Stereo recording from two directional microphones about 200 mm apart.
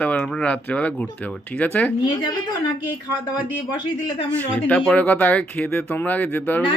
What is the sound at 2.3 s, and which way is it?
Speech, 20° left (ahead or behind).